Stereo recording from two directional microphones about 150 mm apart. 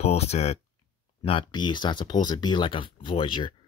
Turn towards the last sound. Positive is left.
turn(degrees=35)  # may be behind; listen again after turning